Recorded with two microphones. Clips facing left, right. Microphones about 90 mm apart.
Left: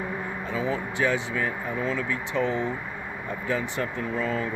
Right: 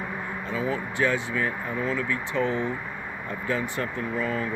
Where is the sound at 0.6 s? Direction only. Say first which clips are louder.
Even; 20° left (ahead or behind).